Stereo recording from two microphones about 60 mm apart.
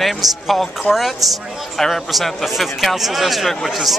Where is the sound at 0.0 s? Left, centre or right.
Centre.